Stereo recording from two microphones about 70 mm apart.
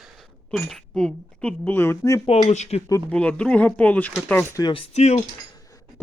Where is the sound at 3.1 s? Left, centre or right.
Centre.